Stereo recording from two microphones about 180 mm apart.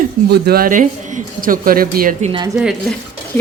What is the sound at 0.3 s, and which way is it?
A man's voice, 60° right (ahead or behind).